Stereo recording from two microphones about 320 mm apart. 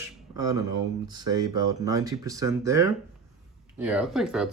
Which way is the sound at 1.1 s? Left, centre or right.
Centre.